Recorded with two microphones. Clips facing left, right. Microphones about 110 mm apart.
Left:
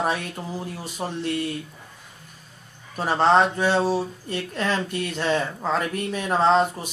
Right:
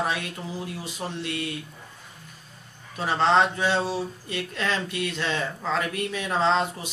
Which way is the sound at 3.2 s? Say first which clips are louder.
Left 3 dB; 45° left (ahead or behind).